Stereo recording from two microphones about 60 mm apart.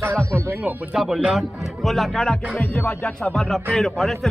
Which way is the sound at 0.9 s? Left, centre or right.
Centre.